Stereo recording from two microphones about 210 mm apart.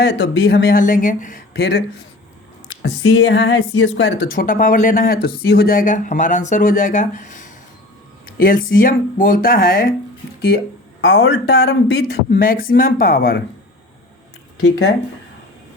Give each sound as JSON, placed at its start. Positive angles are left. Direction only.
{"t": 0.0, "sound": "speech", "side_deg": 50}
{"t": 2.8, "sound": "a woman's voice", "side_deg": 60}
{"t": 4.3, "sound": "speech", "side_deg": 40}
{"t": 11.0, "sound": "a woman's voice", "side_deg": 65}
{"t": 12.0, "sound": "speech", "side_deg": 45}